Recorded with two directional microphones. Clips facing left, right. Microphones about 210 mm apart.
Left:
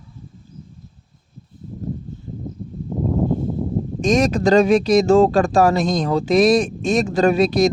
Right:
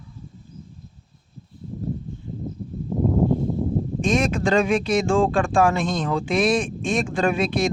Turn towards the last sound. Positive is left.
turn(degrees=40)  # may be behind; listen again after turning